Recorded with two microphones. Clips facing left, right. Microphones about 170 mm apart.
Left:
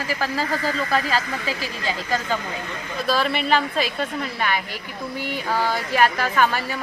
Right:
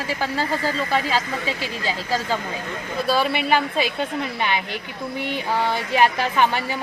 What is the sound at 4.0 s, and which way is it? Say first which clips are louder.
A woman's voice: right 1 dB; 20° right (ahead or behind).